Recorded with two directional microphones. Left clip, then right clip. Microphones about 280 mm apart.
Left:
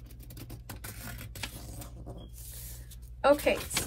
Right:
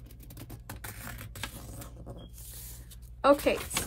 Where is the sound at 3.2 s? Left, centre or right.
Centre.